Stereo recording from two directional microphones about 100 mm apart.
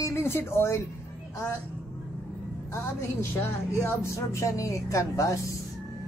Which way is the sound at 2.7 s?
25° left (ahead or behind).